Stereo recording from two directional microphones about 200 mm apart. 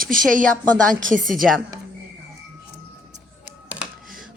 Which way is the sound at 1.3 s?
Centre (ahead or behind).